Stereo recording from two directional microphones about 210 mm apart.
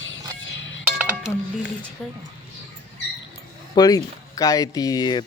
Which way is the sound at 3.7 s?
15° left (ahead or behind).